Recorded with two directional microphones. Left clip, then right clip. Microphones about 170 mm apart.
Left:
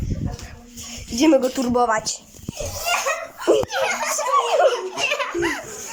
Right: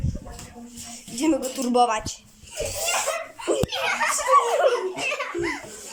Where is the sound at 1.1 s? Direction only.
10° left (ahead or behind).